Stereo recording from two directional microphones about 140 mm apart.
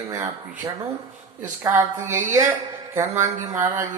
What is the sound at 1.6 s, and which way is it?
Speech, 20° right (ahead or behind).